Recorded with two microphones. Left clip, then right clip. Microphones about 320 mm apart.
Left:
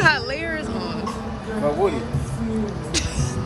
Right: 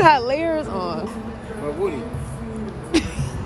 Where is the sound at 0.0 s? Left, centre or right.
Centre.